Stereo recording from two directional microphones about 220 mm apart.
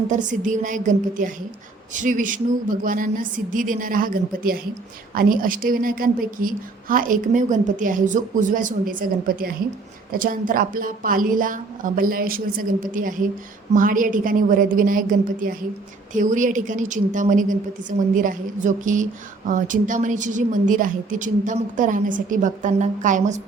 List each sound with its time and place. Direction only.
0.1 s a woman's voice: 35° right (ahead or behind)